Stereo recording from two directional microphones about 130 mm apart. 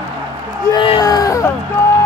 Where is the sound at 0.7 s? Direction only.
40° left (ahead or behind).